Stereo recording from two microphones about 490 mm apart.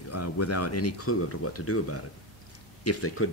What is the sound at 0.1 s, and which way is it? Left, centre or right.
Speech, left.